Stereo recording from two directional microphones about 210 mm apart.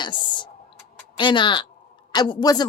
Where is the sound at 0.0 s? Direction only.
20° left (ahead or behind).